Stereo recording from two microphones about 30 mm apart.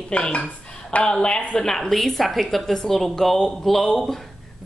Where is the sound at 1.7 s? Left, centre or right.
Centre.